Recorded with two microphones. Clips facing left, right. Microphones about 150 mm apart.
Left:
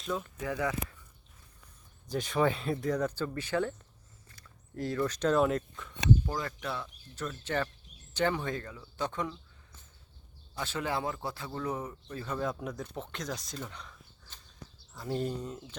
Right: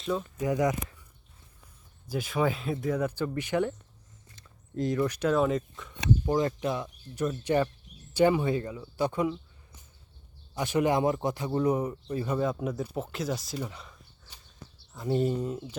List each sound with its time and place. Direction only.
0.2 s speech: 15° right (ahead or behind)
2.0 s speech: 5° right (ahead or behind)
4.3 s a sound: 20° right (ahead or behind)
4.9 s speech: 10° right (ahead or behind)
6.2 s speech: 20° right (ahead or behind)
10.5 s speech: 15° right (ahead or behind)